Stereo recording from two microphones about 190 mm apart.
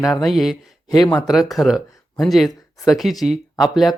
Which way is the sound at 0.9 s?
20° left (ahead or behind).